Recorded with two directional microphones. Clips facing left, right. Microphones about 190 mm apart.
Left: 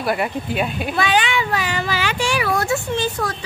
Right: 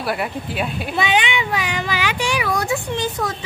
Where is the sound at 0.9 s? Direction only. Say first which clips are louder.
Even; 20° right (ahead or behind).